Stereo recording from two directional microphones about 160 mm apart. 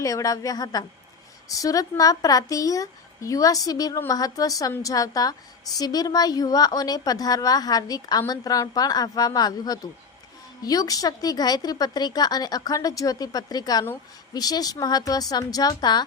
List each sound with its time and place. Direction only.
0.0 s a woman's voice: 20° left (ahead or behind)